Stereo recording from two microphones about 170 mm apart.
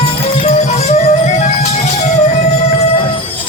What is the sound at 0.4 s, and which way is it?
Music, 40° left (ahead or behind).